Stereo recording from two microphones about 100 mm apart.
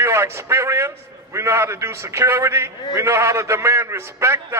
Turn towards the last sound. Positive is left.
turn(degrees=-25)  # may be behind; listen again after turning